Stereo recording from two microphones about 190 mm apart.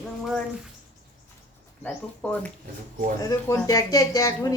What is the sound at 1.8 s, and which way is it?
A woman's voice, 10° left (ahead or behind).